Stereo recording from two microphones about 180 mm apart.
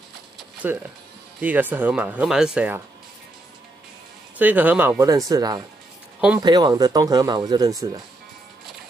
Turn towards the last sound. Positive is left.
turn(degrees=-20)  # may be behind; listen again after turning